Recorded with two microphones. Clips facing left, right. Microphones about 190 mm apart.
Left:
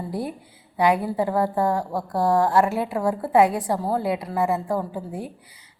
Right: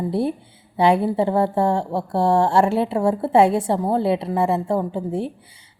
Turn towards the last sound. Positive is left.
turn(degrees=-30)  # may be behind; listen again after turning